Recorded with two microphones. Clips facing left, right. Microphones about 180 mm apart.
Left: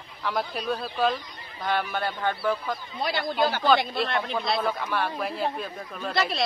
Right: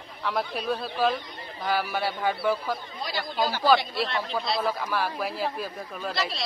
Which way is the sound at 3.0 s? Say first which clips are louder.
Left 5 dB; 55° left (ahead or behind).